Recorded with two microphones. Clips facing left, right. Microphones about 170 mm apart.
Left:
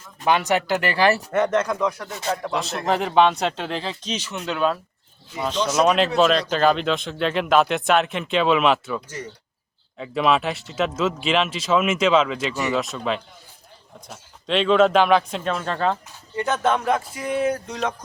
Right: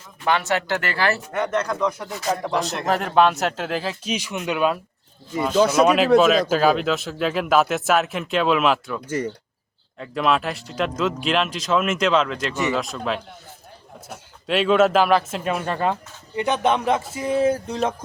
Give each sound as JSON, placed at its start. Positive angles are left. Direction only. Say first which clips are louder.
{"t": 0.3, "sound": "speech", "louder": "left 2 dB", "side_deg": 15}
{"t": 2.0, "sound": "speech", "louder": "right 2 dB", "side_deg": 0}
{"t": 10.0, "sound": "speech", "louder": "left 1 dB", "side_deg": 0}